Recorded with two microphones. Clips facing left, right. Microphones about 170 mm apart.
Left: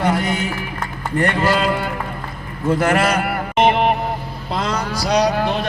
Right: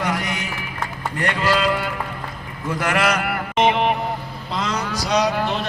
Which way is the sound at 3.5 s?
55° left (ahead or behind).